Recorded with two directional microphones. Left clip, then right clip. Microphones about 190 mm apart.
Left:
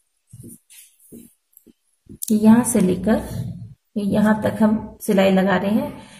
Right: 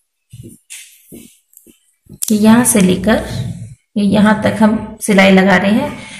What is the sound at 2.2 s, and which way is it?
A woman's voice, 30° left (ahead or behind).